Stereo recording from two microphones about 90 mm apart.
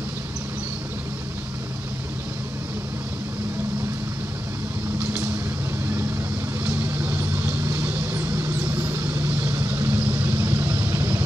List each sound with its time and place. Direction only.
6.7 s vehicle: 20° right (ahead or behind)